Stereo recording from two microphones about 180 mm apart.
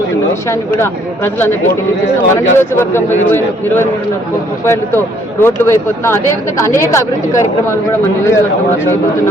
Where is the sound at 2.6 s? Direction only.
10° left (ahead or behind).